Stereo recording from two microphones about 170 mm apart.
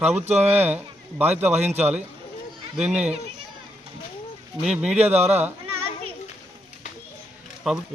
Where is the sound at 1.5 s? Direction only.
40° right (ahead or behind).